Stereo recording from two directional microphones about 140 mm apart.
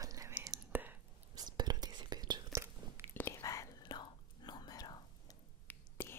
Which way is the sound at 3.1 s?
15° left (ahead or behind).